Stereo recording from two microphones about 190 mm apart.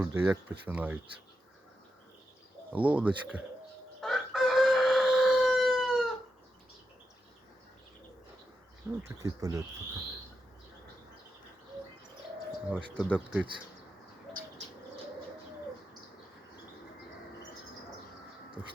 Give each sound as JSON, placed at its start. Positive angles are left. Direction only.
{"t": 0.0, "sound": "speech", "side_deg": -10}
{"t": 2.7, "sound": "speech", "side_deg": -10}
{"t": 4.0, "sound": "chicken", "side_deg": 0}
{"t": 8.9, "sound": "speech", "side_deg": -15}
{"t": 12.9, "sound": "speech", "side_deg": 5}
{"t": 13.1, "sound": "speech", "side_deg": -5}